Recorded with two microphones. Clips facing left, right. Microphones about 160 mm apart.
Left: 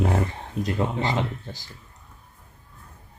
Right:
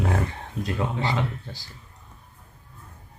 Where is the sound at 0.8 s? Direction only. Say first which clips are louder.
Left 1 dB; 20° left (ahead or behind).